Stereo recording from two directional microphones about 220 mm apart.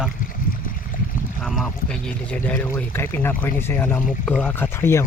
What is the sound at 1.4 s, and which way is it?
Speech, centre (ahead or behind).